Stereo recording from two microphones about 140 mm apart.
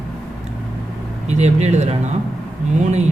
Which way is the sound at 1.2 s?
55° right (ahead or behind).